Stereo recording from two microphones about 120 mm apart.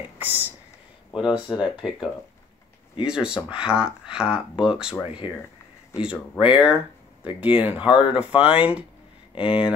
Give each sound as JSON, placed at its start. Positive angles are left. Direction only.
{"t": 0.2, "sound": "speech", "side_deg": -15}